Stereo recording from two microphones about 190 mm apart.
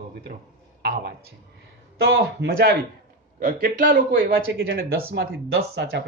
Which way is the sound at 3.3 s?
45° right (ahead or behind).